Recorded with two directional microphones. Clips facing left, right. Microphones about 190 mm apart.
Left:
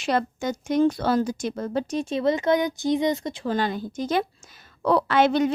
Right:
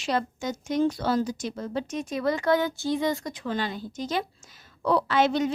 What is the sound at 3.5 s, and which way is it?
A woman's voice, 50° left (ahead or behind).